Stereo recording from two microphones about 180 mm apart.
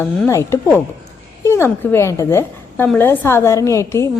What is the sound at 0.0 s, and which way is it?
A woman's voice, 15° left (ahead or behind).